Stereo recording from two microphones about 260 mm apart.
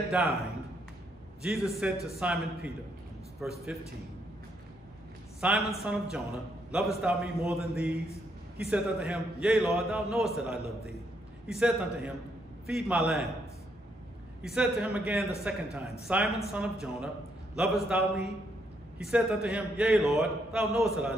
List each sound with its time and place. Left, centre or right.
0.1 s a man's voice: centre
5.4 s a man's voice: centre
14.4 s a man's voice: centre